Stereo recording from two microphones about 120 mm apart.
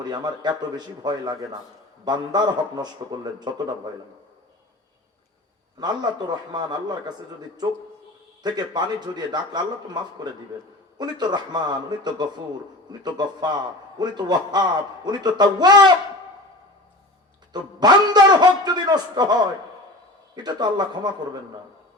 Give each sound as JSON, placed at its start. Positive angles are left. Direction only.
{"t": 0.0, "sound": "a man's voice", "side_deg": -35}
{"t": 5.8, "sound": "a man's voice", "side_deg": -35}
{"t": 8.4, "sound": "a man's voice", "side_deg": -35}
{"t": 17.5, "sound": "a man's voice", "side_deg": -35}